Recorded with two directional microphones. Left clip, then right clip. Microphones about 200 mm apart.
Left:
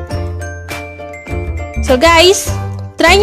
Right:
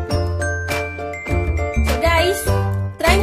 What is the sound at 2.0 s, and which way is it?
Music, 55° left (ahead or behind).